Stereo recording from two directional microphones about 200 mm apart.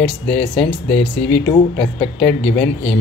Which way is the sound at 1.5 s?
30° left (ahead or behind).